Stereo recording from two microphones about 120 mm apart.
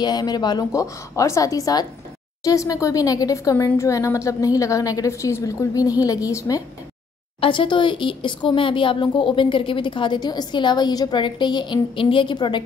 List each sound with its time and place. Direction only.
0.0 s a woman's voice: 35° left (ahead or behind)
7.3 s speech: 45° left (ahead or behind)